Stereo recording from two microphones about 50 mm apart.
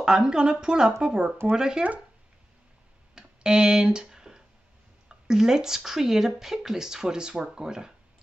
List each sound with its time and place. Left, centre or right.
0.0 s speech: centre
3.2 s a sound: centre
5.0 s speech: centre